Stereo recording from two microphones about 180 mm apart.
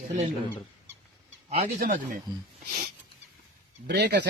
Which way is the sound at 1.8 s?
50° right (ahead or behind).